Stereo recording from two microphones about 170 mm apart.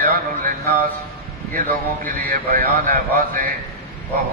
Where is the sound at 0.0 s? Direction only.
55° right (ahead or behind).